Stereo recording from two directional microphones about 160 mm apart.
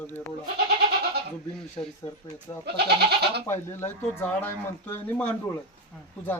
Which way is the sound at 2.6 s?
90° right.